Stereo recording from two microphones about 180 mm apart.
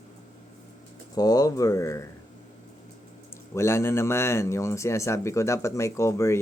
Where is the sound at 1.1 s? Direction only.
20° left (ahead or behind).